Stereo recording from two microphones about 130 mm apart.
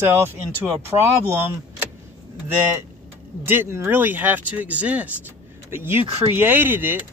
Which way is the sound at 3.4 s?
20° right (ahead or behind).